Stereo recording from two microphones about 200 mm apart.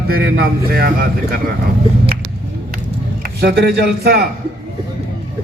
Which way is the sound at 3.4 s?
55° right (ahead or behind).